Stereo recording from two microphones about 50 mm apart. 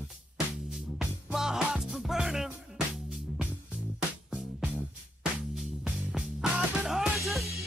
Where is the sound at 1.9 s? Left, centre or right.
Centre.